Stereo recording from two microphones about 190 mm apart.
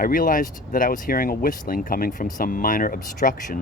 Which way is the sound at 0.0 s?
45° left (ahead or behind).